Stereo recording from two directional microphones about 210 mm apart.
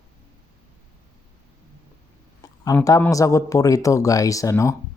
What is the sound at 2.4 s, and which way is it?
Speech, 15° left (ahead or behind).